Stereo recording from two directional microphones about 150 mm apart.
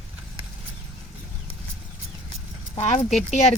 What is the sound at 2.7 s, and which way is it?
Speech, 40° left (ahead or behind).